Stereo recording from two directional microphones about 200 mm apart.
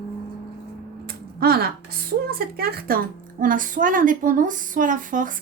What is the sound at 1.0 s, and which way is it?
Speech, 50° right (ahead or behind).